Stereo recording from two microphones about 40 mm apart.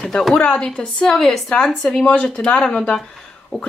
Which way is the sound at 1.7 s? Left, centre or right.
Left.